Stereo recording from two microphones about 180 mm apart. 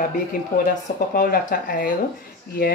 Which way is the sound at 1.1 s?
55° left (ahead or behind).